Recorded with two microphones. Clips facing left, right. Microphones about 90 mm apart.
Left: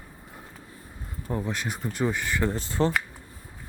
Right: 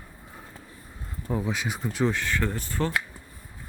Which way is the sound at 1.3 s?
Centre (ahead or behind).